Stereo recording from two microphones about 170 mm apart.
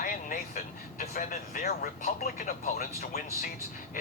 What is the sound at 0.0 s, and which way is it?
Speech, 55° left (ahead or behind).